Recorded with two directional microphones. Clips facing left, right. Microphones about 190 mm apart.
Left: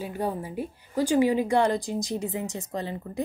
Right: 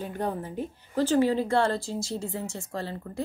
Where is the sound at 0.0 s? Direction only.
10° left (ahead or behind).